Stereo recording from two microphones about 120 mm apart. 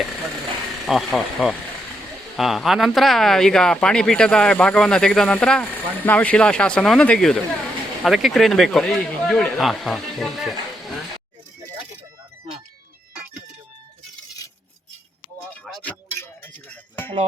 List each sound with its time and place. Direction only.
0.9 s speech: centre (ahead or behind)
15.8 s music: 15° left (ahead or behind)